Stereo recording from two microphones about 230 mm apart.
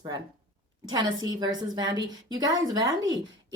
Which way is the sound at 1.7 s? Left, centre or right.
Centre.